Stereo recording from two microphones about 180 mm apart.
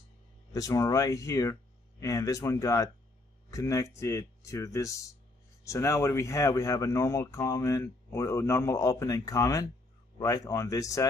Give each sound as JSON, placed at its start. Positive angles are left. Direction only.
{"t": 0.5, "sound": "speech", "side_deg": 20}